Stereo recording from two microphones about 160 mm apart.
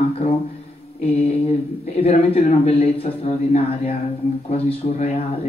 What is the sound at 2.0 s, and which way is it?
Speech, 40° left (ahead or behind).